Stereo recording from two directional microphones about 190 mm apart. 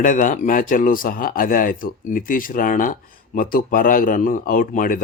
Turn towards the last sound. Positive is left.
turn(degrees=45)  # may be behind; listen again after turning